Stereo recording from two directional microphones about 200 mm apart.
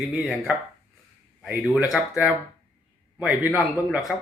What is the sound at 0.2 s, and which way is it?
Speech, 5° right (ahead or behind).